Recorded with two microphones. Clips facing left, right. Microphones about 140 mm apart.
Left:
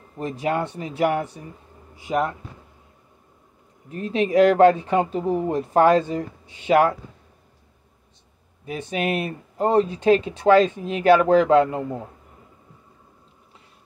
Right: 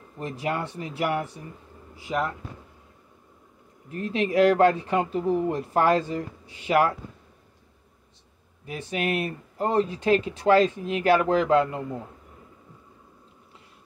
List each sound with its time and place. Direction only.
0.2 s speech: 25° left (ahead or behind)
3.9 s speech: 20° left (ahead or behind)
8.6 s speech: 20° left (ahead or behind)